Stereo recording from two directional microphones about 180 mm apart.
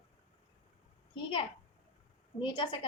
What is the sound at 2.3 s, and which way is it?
Speech, 25° left (ahead or behind).